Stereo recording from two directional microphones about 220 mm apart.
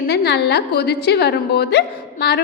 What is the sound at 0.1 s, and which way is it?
A woman's voice, 50° left (ahead or behind).